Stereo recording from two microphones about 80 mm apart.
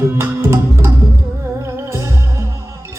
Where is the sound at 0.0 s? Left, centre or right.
Right.